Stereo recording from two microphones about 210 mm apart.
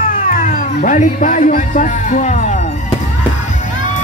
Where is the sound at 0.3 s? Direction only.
40° left (ahead or behind).